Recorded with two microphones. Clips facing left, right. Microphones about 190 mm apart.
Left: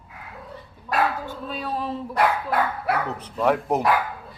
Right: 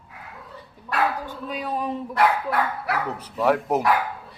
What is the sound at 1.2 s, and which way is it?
Speech, 15° right (ahead or behind).